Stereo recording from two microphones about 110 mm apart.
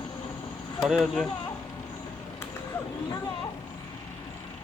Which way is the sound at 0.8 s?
5° right (ahead or behind).